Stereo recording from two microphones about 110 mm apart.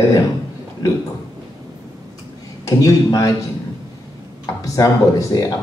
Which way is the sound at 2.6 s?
30° left (ahead or behind).